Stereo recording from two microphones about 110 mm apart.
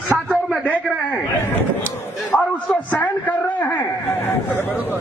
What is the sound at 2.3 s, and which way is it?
A man's voice, 15° left (ahead or behind).